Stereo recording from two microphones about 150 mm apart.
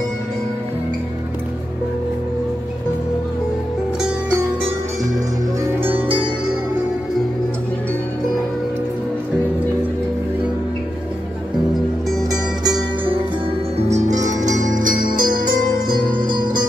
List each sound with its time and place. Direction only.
12.1 s music: centre (ahead or behind)
13.7 s music: 50° right (ahead or behind)
14.7 s music: 65° right (ahead or behind)
15.1 s music: 30° right (ahead or behind)